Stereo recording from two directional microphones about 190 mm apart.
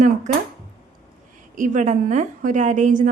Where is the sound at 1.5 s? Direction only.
40° right (ahead or behind).